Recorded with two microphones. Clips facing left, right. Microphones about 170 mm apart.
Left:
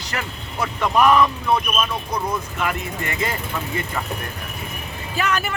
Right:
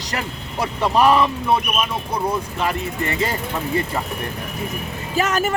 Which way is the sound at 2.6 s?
35° right (ahead or behind).